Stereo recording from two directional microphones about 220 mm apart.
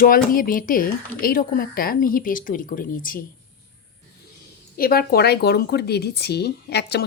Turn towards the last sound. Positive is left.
turn(degrees=50)  # may be behind; listen again after turning